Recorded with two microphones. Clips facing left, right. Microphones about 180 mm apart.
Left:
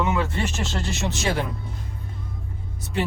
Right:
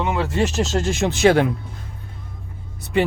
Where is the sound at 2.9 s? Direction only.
65° right (ahead or behind).